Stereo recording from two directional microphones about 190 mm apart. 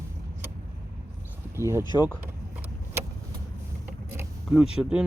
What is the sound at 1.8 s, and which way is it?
Speech, 20° left (ahead or behind).